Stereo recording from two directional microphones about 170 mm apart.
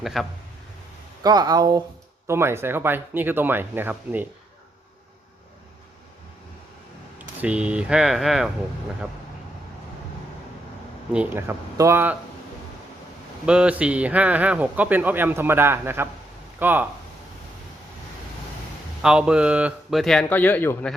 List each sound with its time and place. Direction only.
0.0 s speech: centre (ahead or behind)
1.2 s speech: 25° right (ahead or behind)
7.2 s speech: 10° right (ahead or behind)
11.1 s speech: 10° right (ahead or behind)
13.4 s speech: 5° right (ahead or behind)
19.0 s speech: 5° right (ahead or behind); by 20.9 s 10° left (ahead or behind)